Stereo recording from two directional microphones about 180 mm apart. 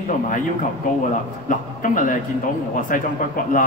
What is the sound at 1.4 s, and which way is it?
Speech, 45° left (ahead or behind).